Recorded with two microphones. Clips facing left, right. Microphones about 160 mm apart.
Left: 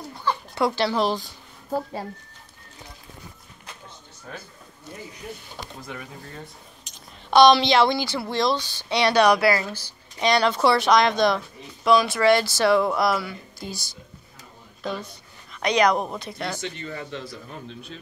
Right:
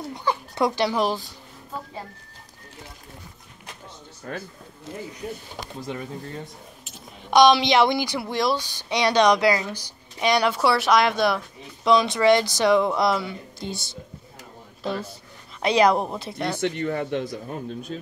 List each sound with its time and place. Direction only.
0.1 s a sound: 15° right (ahead or behind)
5.9 s speech: 30° right (ahead or behind)
6.9 s speech: 10° right (ahead or behind)
9.1 s speech: 10° left (ahead or behind)
9.4 s speech: 15° right (ahead or behind)
11.8 s speech: 25° right (ahead or behind)
15.6 s speech: 30° right (ahead or behind)
16.6 s a man's voice: 60° right (ahead or behind); by 18.0 s 45° right (ahead or behind)